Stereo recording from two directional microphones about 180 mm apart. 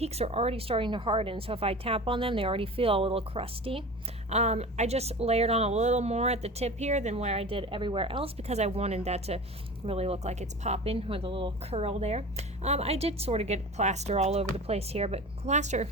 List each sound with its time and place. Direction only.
0.0 s speech: 35° right (ahead or behind)